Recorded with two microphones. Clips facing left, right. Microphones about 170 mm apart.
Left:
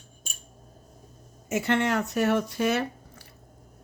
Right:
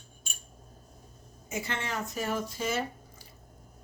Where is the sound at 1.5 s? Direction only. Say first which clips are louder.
Left 10 dB; 70° left (ahead or behind).